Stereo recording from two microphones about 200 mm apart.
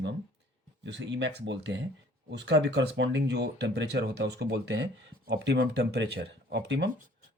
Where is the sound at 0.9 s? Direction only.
65° right (ahead or behind).